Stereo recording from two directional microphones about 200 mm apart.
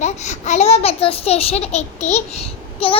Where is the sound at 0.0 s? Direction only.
35° left (ahead or behind).